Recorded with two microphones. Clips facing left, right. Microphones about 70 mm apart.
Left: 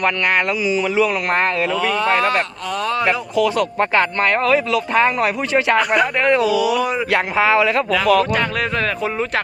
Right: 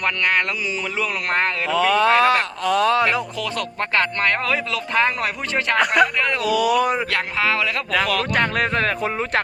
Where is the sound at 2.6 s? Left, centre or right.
Right.